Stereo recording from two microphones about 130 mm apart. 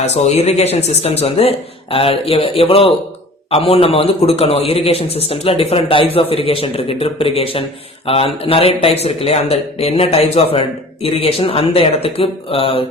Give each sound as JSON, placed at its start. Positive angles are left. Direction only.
{"t": 0.0, "sound": "a man's voice", "side_deg": 55}